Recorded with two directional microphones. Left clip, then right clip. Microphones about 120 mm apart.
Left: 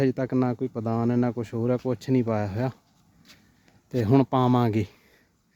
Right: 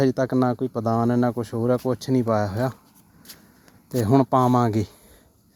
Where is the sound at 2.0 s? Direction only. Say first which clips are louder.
Right 2 dB; 45° left (ahead or behind).